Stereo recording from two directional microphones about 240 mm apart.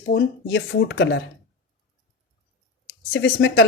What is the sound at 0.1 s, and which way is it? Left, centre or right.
A woman's voice, left.